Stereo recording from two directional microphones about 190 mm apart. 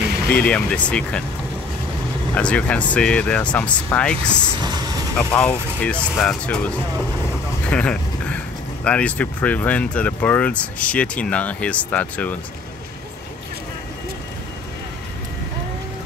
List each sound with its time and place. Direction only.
0.3 s speech: 5° left (ahead or behind)
2.3 s speech: 5° left (ahead or behind)
4.6 s speech: 20° right (ahead or behind)
5.1 s speech: 10° left (ahead or behind)
7.7 s vehicle: 5° left (ahead or behind)
8.8 s speech: 5° left (ahead or behind)